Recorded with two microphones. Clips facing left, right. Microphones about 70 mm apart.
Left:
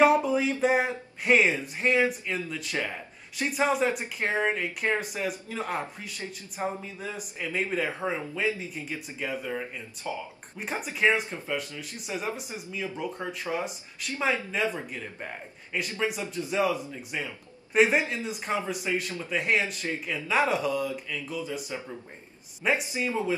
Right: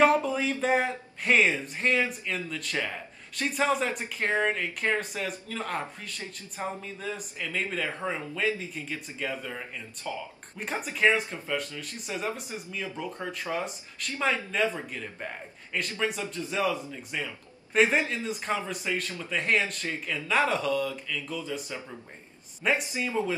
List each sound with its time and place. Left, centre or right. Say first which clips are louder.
0.0 s speech: left 2 dB; centre
10.6 s speech: right 1 dB; centre
15.7 s speech: left 1 dB; centre
19.9 s speech: left 1 dB; centre
20.2 s speech: even; centre